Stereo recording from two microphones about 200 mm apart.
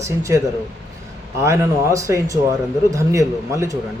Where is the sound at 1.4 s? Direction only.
15° right (ahead or behind).